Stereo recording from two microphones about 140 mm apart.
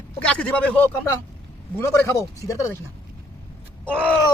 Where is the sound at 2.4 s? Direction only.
20° left (ahead or behind).